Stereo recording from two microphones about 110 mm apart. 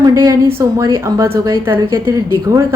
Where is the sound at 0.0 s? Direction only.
35° right (ahead or behind).